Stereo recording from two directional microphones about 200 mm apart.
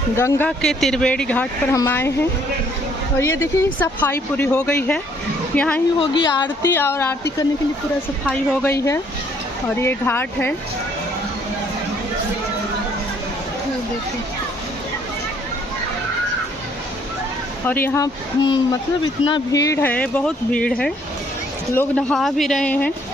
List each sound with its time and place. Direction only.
0.2 s speech: 10° left (ahead or behind)
3.4 s speech: 10° left (ahead or behind)
6.0 s speech: 25° left (ahead or behind)
6.7 s speech: 10° left (ahead or behind)
8.3 s speech: 5° left (ahead or behind)
17.7 s speech: 10° left (ahead or behind)